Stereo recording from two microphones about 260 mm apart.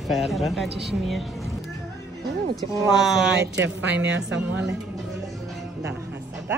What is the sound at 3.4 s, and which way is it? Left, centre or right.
A woman's voice, right.